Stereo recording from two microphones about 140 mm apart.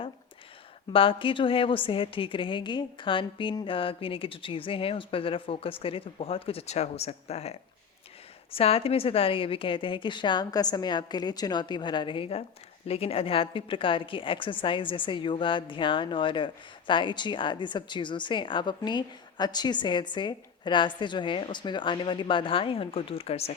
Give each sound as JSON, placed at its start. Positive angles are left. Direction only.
{"t": 0.9, "sound": "a woman's voice", "side_deg": 40}
{"t": 8.5, "sound": "a woman's voice", "side_deg": 45}